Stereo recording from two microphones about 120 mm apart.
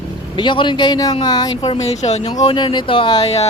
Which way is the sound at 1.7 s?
65° left (ahead or behind).